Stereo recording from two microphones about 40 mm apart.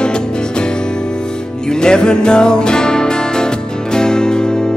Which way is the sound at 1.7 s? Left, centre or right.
Centre.